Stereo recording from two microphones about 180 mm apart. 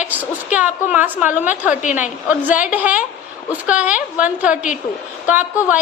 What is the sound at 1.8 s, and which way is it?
Speech, 45° left (ahead or behind).